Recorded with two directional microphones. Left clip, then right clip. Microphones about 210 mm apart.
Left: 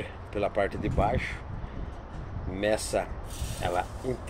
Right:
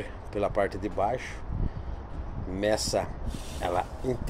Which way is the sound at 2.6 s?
15° right (ahead or behind).